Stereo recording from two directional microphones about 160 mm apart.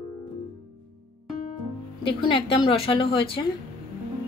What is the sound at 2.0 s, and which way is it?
A woman's voice, 35° left (ahead or behind).